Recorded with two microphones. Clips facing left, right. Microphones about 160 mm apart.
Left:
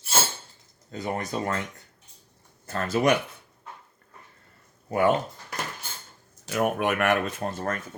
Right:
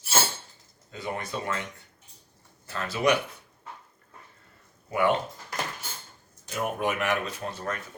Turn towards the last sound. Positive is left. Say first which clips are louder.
# left 4 dB
turn(degrees=45)  # may be behind; listen again after turning